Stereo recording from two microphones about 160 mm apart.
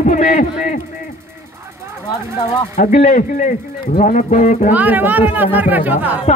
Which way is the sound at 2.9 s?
50° left (ahead or behind).